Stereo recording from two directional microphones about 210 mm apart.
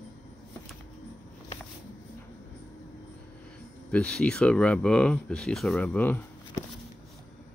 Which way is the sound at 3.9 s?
5° left (ahead or behind).